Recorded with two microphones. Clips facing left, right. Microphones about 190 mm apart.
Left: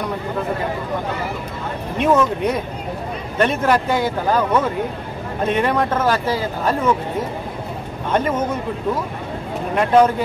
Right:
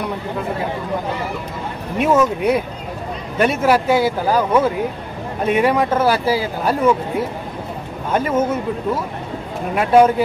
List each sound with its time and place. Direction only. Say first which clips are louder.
2.0 s speech: right 1 dB; 5° right (ahead or behind)
9.8 s speech: right 2 dB; 10° right (ahead or behind)